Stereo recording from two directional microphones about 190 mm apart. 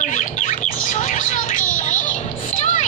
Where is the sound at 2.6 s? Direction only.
40° left (ahead or behind).